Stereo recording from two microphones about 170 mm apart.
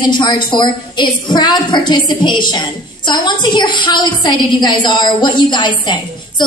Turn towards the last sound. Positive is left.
turn(degrees=25)  # may be behind; listen again after turning